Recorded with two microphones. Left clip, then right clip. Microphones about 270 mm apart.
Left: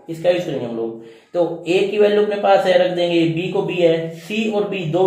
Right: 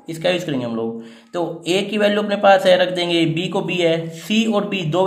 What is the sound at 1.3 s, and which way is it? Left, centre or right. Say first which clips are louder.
A man's voice: left 3 dB; centre.